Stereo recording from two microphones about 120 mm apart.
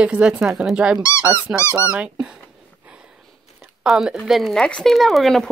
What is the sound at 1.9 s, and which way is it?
Speech, 10° right (ahead or behind).